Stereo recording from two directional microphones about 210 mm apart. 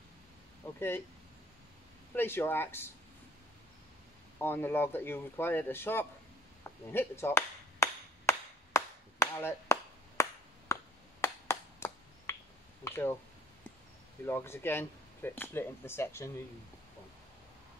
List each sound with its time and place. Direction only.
0.7 s speech: 10° left (ahead or behind)
2.1 s speech: 10° left (ahead or behind)
4.4 s speech: 10° left (ahead or behind)
6.6 s chop: 10° left (ahead or behind)
10.7 s finger snapping: 15° left (ahead or behind)
12.8 s speech: 10° left (ahead or behind)
14.2 s speech: 10° left (ahead or behind)